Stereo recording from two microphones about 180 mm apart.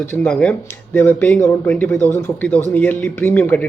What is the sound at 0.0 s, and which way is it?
A man's voice, 10° left (ahead or behind).